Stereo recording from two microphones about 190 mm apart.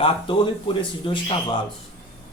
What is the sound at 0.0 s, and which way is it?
A man's voice, 25° left (ahead or behind).